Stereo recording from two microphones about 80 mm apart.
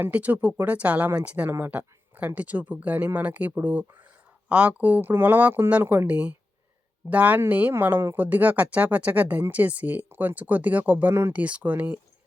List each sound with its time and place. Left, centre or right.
0.0 s speech: centre
1.5 s speech: right
11.3 s speech: centre